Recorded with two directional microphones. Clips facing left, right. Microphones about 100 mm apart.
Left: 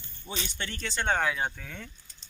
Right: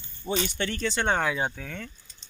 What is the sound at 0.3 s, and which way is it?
Speech, 65° right (ahead or behind).